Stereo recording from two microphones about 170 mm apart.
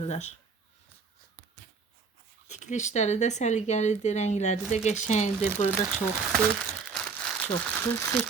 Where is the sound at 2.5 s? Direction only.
45° left (ahead or behind).